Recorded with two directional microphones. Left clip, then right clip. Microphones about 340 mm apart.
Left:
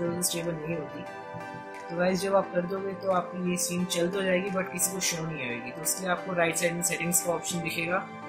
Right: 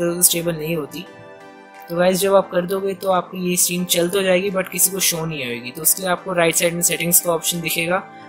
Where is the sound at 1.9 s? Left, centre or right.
Right.